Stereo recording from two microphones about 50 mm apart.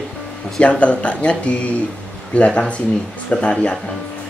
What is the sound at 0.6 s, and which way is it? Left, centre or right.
Speech, left.